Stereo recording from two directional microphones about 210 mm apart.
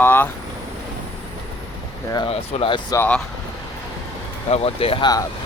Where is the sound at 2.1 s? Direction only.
25° left (ahead or behind).